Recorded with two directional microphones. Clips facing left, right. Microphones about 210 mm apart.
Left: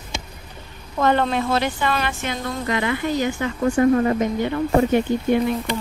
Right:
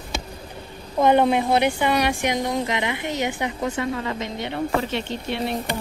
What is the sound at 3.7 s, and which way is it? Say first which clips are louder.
Speech: left 10 dB; 45° left (ahead or behind).